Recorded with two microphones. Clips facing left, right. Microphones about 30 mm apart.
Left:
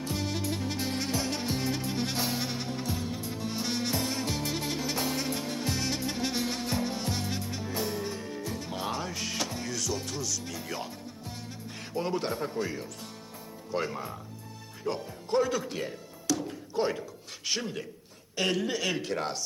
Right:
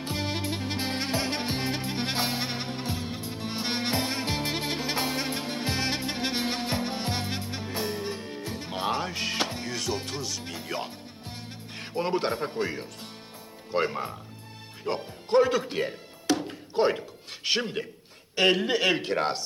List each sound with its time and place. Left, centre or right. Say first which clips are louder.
0.0 s music: right 2 dB; right
13.7 s speech: right 5 dB; right
14.8 s music: right 3 dB; right
17.4 s a man's voice: right 5 dB; right